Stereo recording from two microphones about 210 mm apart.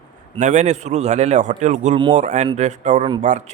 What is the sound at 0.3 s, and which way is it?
A man's voice, 35° right (ahead or behind).